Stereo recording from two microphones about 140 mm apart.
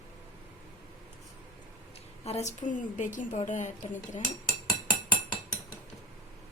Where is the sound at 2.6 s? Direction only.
65° left (ahead or behind).